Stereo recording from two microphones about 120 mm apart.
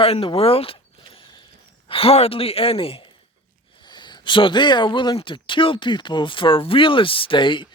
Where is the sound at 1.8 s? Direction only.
50° left (ahead or behind).